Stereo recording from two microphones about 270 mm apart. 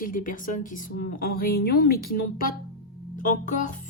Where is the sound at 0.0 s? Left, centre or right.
Left.